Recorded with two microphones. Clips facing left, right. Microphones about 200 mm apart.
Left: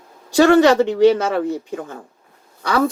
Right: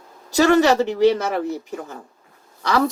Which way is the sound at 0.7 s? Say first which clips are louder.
Left 3 dB; 50° left (ahead or behind).